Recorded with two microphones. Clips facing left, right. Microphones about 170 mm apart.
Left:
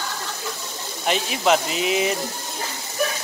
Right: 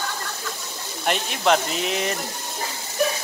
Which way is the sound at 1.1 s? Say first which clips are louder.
Left 1 dB; 5° left (ahead or behind).